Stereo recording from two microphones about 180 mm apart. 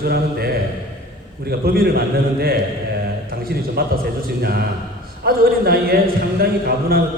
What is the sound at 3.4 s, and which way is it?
A man's voice, 55° right (ahead or behind).